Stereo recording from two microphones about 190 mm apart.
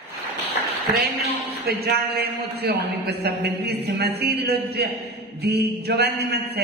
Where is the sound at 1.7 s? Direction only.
55° right (ahead or behind).